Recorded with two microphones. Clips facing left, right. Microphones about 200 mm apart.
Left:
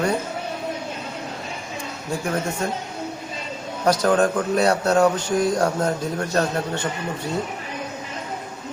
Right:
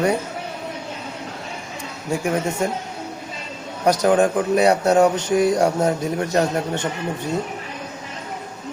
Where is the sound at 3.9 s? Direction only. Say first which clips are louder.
Right 2 dB; 15° right (ahead or behind).